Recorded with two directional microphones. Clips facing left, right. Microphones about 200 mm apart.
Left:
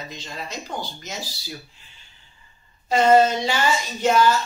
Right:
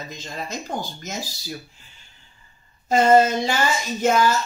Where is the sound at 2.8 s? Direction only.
45° right (ahead or behind).